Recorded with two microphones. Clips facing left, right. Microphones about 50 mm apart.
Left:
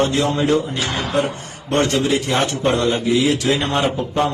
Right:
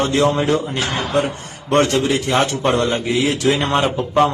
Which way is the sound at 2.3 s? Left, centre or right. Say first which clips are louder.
Right 1 dB; right.